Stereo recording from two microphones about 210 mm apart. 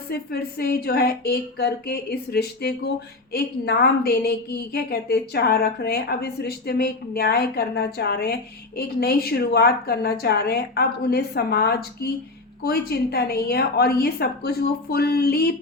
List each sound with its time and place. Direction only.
0.1 s a woman's voice: 50° left (ahead or behind)